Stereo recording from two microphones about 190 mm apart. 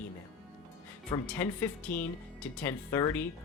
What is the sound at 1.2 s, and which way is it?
Speech, 10° left (ahead or behind).